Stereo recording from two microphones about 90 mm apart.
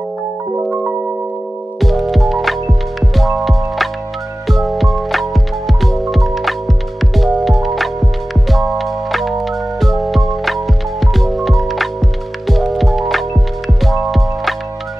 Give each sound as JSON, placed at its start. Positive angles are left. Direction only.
{"t": 0.6, "sound": "music", "side_deg": -20}
{"t": 1.8, "sound": "music", "side_deg": 0}